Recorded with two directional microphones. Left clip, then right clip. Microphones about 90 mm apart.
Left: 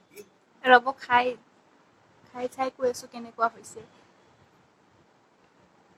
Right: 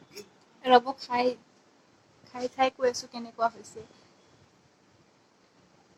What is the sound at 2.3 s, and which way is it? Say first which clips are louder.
Speech: left 1 dB; 30° left (ahead or behind).